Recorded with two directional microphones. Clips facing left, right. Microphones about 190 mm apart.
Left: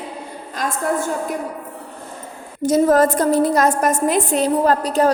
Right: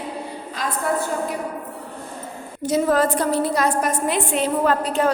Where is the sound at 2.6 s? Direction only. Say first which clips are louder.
Left 5 dB; 45° left (ahead or behind).